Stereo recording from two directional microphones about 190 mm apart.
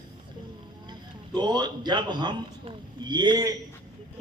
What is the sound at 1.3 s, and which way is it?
A man's voice, 20° right (ahead or behind).